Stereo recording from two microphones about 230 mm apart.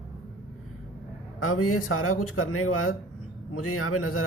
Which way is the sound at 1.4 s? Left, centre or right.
Left.